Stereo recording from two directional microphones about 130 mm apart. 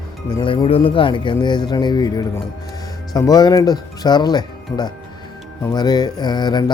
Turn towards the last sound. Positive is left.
turn(degrees=35)  # may be behind; listen again after turning